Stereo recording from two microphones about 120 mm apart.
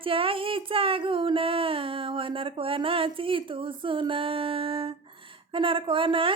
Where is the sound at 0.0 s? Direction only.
50° right (ahead or behind).